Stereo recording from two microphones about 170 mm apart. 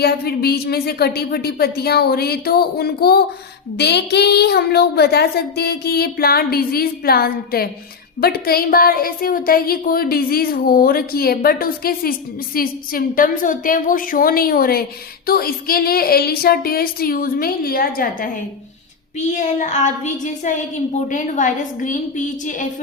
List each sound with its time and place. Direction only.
0.0 s a woman's voice: 65° left (ahead or behind)
3.8 s a woman's voice: 75° left (ahead or behind); by 18.3 s 60° left (ahead or behind)
19.3 s a woman's voice: 45° left (ahead or behind)